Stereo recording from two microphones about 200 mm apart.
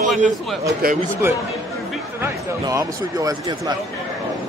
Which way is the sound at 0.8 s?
50° right (ahead or behind).